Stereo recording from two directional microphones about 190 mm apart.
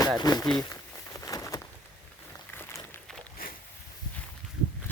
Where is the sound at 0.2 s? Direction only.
20° left (ahead or behind).